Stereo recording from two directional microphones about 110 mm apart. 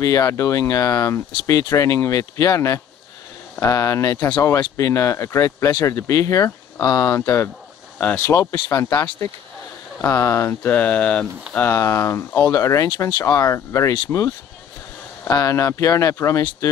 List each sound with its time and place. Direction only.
0.0 s speech: 30° left (ahead or behind)
8.0 s speech: 15° left (ahead or behind)
8.3 s speech: 35° left (ahead or behind)
10.7 s speech: 10° left (ahead or behind)
11.5 s speech: 25° left (ahead or behind)
12.4 s speech: 35° left (ahead or behind)